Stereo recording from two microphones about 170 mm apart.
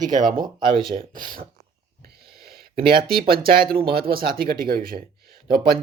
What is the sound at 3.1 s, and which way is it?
Speech, 60° right (ahead or behind).